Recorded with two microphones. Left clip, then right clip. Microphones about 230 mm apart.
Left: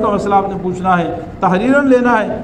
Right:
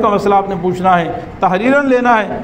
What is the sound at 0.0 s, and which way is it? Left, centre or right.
A man's voice, right.